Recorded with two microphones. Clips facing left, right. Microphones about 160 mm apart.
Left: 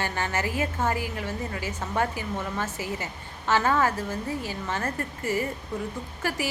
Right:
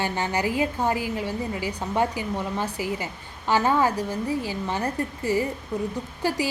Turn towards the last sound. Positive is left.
turn(degrees=-20)  # may be behind; listen again after turning